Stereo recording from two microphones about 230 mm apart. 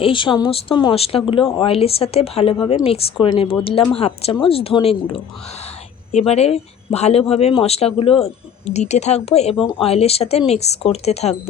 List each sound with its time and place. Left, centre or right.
0.0 s speech: left